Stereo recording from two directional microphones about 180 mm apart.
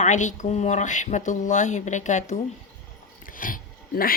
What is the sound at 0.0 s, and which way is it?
A woman's voice, 40° left (ahead or behind).